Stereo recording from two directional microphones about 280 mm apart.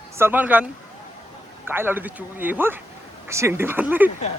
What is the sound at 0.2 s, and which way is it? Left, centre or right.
Speech, centre.